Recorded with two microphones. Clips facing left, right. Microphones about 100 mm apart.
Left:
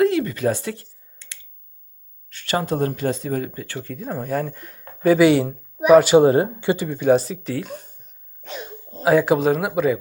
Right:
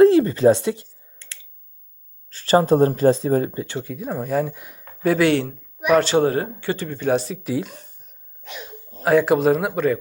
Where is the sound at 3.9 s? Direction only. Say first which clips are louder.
Left 1 dB; 5° right (ahead or behind).